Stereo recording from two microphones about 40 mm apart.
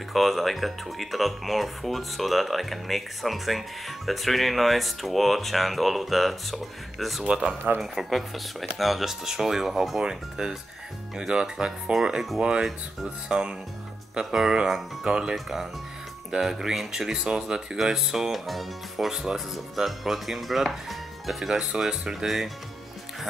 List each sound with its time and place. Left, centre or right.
0.1 s speech: centre
15.3 s speech: centre